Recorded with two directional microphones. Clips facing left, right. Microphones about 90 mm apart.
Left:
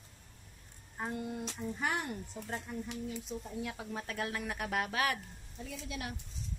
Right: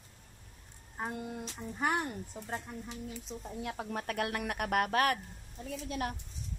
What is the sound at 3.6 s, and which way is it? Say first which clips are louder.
Speech: right 3 dB; 45° right (ahead or behind).